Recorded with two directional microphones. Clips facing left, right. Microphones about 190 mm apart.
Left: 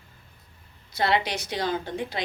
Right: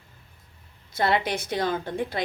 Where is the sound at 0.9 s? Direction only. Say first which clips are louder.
Right 1 dB; 50° right (ahead or behind).